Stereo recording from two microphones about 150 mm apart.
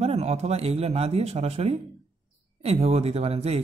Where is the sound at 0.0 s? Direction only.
45° right (ahead or behind).